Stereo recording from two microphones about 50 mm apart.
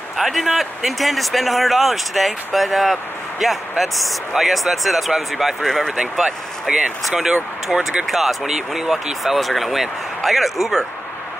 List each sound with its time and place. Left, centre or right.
0.2 s speech: centre
5.9 s speech: centre
7.1 s speech: centre